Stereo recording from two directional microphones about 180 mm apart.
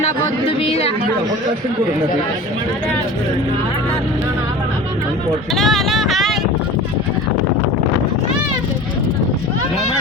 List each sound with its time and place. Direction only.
0.6 s chatter: 35° left (ahead or behind)
5.5 s vehicle: centre (ahead or behind)